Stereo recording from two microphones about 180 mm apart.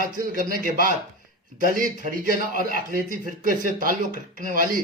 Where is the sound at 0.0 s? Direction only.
50° right (ahead or behind).